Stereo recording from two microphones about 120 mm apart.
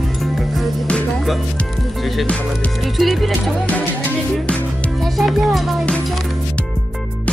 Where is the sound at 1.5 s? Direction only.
Centre (ahead or behind).